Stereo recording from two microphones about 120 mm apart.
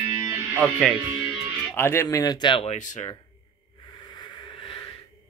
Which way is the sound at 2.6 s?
80° left.